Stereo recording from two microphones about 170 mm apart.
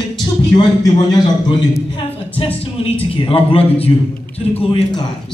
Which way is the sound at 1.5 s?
25° left (ahead or behind).